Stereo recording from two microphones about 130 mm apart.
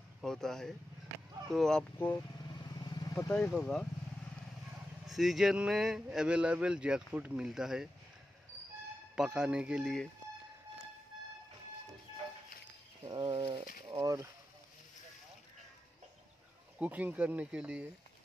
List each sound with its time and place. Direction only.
0.2 s speech: 5° left (ahead or behind)
2.8 s vehicle: 30° left (ahead or behind)
3.3 s speech: 5° left (ahead or behind)
5.0 s speech: centre (ahead or behind)
9.1 s speech: 5° right (ahead or behind)
13.0 s a sound: 35° right (ahead or behind)
14.0 s speech: 25° right (ahead or behind)
16.7 s speech: 10° right (ahead or behind)